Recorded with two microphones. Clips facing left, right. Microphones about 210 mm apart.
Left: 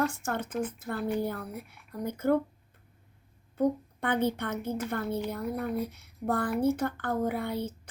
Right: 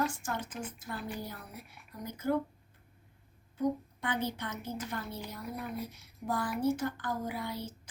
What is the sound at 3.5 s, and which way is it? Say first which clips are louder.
A woman's voice: left 4 dB; 55° left (ahead or behind).